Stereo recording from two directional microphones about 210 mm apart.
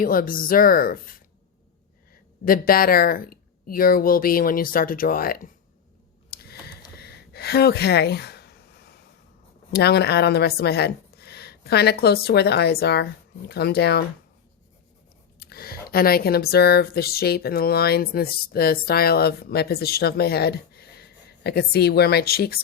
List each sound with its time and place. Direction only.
0.0 s speech: 40° left (ahead or behind)
2.4 s speech: 45° left (ahead or behind)
6.3 s a sound: 50° left (ahead or behind)
9.7 s speech: 50° left (ahead or behind)
15.4 s speech: 50° left (ahead or behind)